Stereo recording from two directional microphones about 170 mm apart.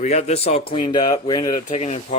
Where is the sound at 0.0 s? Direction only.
40° left (ahead or behind); by 1.6 s 25° left (ahead or behind).